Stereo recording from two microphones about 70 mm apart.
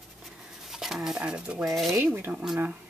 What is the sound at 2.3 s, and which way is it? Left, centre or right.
Speech, centre.